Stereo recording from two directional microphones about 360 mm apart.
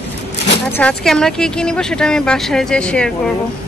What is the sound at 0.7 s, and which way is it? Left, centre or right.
Speech, centre.